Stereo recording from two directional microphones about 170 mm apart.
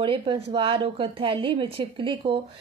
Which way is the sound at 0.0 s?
30° right (ahead or behind).